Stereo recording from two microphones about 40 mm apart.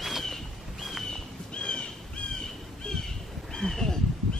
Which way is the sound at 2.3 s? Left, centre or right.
Centre.